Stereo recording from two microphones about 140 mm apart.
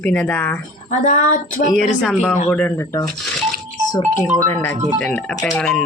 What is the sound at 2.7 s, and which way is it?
Speech, 25° left (ahead or behind).